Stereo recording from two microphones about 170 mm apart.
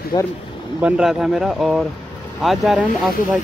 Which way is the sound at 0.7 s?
5° right (ahead or behind).